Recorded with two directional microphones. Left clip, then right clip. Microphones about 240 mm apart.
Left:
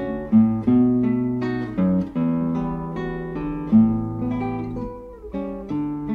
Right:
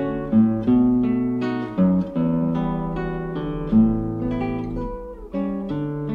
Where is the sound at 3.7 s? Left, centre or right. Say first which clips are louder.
Left 1 dB; left.